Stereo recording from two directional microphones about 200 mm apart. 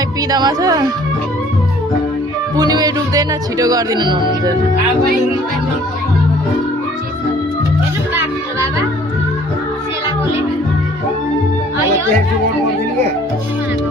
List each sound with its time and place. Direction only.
0.3 s speech: 20° right (ahead or behind)
2.6 s speech: 20° right (ahead or behind)